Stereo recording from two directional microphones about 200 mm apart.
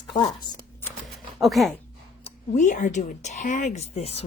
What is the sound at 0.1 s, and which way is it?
Speech, 20° left (ahead or behind).